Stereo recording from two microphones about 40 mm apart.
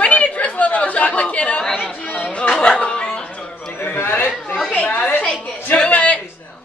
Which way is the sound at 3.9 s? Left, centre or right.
Left.